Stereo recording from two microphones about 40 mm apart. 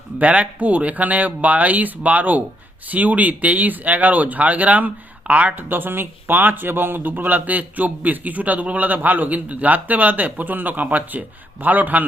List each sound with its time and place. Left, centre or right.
0.2 s speech: right